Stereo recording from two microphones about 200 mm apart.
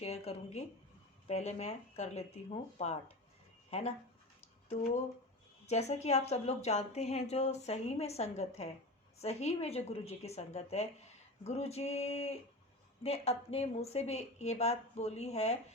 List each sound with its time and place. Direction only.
0.0 s a woman's voice: 30° left (ahead or behind)
5.6 s a woman's voice: 35° left (ahead or behind)